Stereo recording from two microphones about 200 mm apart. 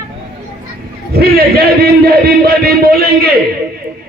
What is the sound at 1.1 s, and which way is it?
A man's voice, 50° right (ahead or behind).